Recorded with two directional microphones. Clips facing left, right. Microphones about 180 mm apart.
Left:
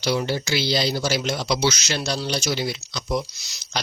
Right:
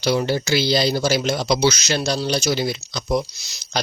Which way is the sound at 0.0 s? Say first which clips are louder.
Right 4 dB; 45° right (ahead or behind).